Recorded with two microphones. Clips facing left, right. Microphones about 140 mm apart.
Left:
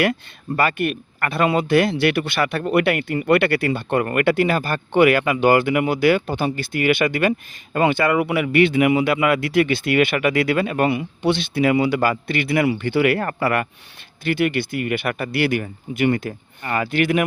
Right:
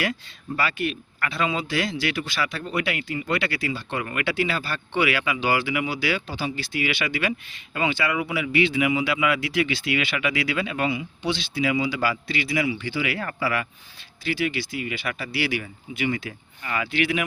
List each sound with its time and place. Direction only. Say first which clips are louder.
0.0 s speech: left 8 dB; 55° left (ahead or behind)